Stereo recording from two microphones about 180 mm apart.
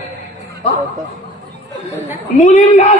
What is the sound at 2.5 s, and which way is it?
Speech, 45° left (ahead or behind).